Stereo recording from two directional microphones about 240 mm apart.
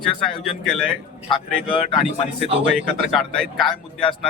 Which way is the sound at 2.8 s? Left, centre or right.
Centre.